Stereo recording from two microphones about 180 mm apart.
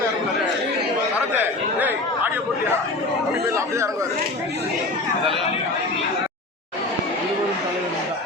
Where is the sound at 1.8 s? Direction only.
10° right (ahead or behind).